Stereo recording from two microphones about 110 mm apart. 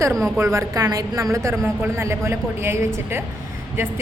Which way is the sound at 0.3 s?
30° right (ahead or behind).